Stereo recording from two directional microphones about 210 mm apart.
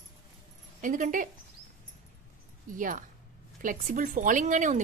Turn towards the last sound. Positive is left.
turn(degrees=-35)  # may be behind; listen again after turning